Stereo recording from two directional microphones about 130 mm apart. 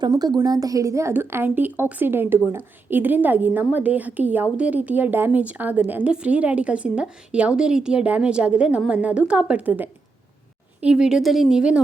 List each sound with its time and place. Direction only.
0.0 s a woman's voice: 30° right (ahead or behind); by 11.8 s 5° right (ahead or behind)